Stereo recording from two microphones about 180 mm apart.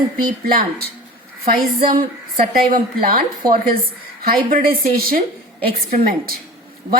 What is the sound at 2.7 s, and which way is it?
Speech, 50° right (ahead or behind).